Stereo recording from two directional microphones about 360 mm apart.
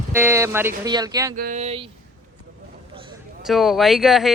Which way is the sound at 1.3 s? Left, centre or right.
Right.